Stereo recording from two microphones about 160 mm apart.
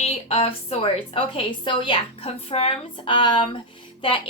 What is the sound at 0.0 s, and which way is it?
A woman's voice, 35° left (ahead or behind).